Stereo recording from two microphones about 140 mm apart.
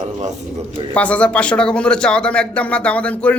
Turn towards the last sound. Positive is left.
turn(degrees=10)  # may be behind; listen again after turning